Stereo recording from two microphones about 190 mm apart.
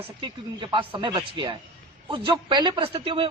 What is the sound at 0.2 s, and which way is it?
Speech, 25° right (ahead or behind).